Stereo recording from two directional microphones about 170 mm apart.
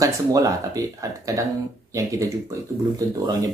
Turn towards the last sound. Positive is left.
turn(degrees=-20)  # may be behind; listen again after turning